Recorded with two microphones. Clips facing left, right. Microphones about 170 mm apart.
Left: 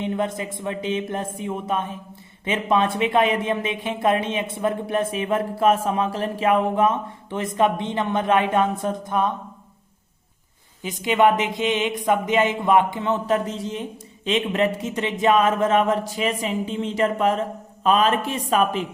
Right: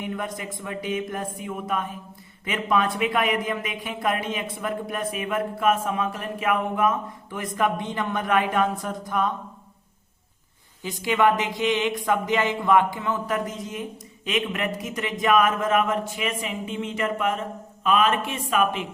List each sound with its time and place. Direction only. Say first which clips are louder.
0.0 s speech: left 6 dB; 25° left (ahead or behind)
10.8 s speech: left 3 dB; 20° left (ahead or behind); by 18.9 s 35° left (ahead or behind)